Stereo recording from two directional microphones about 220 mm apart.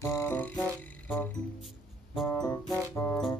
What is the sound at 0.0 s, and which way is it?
Music, 10° left (ahead or behind).